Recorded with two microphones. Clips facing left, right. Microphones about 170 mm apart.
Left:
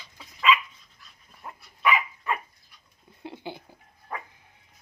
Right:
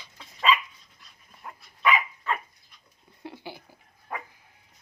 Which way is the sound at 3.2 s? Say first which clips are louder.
Left 2 dB; 20° left (ahead or behind).